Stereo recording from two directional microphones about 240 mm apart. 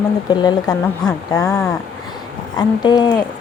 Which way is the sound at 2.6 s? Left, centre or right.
Centre.